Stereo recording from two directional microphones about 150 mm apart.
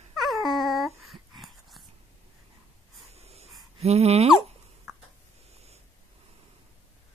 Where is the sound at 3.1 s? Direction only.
45° right (ahead or behind).